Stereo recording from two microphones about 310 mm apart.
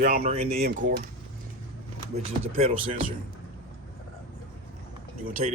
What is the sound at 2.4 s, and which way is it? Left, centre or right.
Speech, centre.